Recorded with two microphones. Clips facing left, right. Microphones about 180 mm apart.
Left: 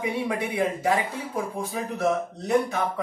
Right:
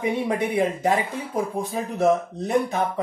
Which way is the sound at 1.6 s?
20° right (ahead or behind).